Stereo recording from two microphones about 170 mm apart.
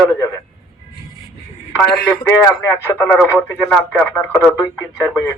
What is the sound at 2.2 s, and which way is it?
A man's voice, 15° left (ahead or behind).